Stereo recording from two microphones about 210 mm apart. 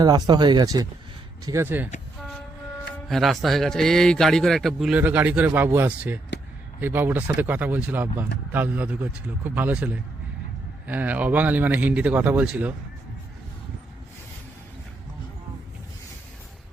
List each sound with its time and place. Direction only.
0.0 s speech: 20° right (ahead or behind)
3.1 s a man's voice: centre (ahead or behind)